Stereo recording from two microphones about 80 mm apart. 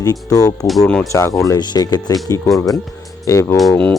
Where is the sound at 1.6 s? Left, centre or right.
Left.